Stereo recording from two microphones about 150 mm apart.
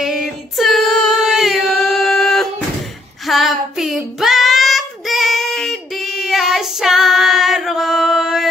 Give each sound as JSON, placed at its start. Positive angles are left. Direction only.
{"t": 0.0, "sound": "female singing", "side_deg": 0}
{"t": 3.3, "sound": "child singing", "side_deg": 0}